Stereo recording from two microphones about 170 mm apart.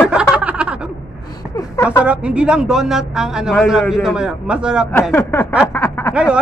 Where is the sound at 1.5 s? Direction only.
15° left (ahead or behind).